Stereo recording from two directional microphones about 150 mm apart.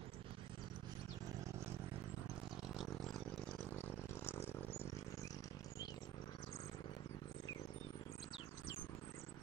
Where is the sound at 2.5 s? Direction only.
Centre (ahead or behind); by 4.6 s 15° left (ahead or behind).